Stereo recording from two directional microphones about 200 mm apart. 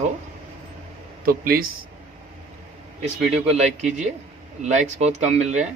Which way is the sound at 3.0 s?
35° right (ahead or behind).